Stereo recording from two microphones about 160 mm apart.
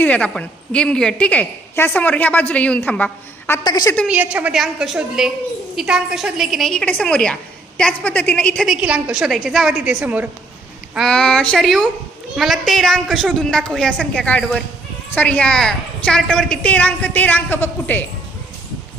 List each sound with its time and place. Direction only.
0.0 s a woman's voice: 10° left (ahead or behind)
3.6 s a woman's voice: 25° left (ahead or behind)
4.0 s a woman's voice: 10° right (ahead or behind)
10.9 s a woman's voice: 5° left (ahead or behind)